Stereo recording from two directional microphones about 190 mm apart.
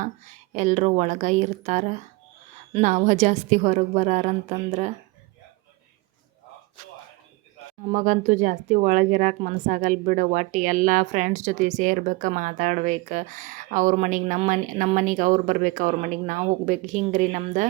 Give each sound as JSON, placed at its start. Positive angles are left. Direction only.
{"t": 0.5, "sound": "a woman's voice", "side_deg": -40}
{"t": 7.9, "sound": "speech", "side_deg": -40}